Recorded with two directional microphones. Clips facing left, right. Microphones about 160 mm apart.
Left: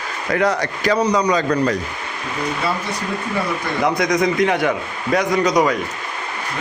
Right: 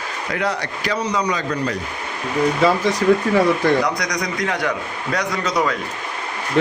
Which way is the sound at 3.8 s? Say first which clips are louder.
Left 6 dB; 25° left (ahead or behind).